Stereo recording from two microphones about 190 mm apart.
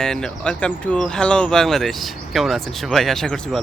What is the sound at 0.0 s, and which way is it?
Speech, 5° left (ahead or behind).